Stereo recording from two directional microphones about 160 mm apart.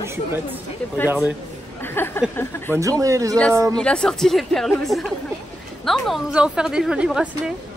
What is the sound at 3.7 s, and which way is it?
A woman's voice, 5° left (ahead or behind).